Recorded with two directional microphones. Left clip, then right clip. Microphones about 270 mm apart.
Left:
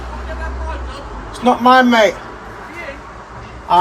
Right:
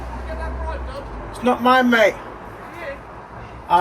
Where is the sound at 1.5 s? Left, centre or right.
Centre.